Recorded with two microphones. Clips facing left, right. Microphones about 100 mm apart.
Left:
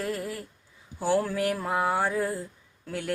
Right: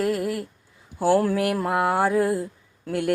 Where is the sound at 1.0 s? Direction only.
5° right (ahead or behind).